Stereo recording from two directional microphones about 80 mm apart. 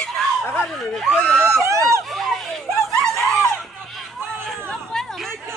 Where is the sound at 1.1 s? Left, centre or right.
Centre.